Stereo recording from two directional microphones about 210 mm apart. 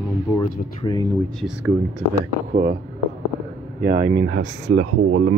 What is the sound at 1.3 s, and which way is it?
Speech, 5° right (ahead or behind).